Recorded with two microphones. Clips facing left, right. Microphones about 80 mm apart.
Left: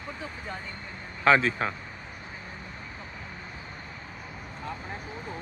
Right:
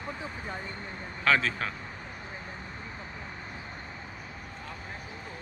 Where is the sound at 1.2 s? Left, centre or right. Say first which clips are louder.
Left 5 dB; left.